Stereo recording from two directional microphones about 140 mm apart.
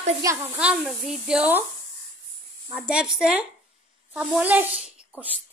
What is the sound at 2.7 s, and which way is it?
Speech, 5° right (ahead or behind).